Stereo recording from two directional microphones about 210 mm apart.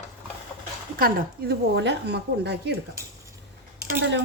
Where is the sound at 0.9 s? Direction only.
45° right (ahead or behind).